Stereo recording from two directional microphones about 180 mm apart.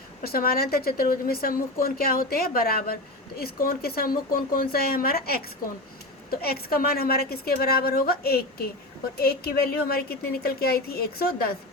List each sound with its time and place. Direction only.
0.2 s a woman's voice: 55° left (ahead or behind)
6.4 s a woman's voice: 60° left (ahead or behind)